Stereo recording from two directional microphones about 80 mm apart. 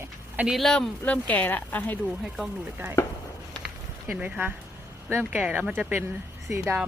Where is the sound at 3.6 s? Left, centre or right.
Centre.